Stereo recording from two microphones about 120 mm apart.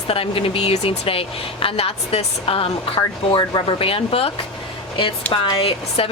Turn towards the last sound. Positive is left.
turn(degrees=50)  # may be behind; listen again after turning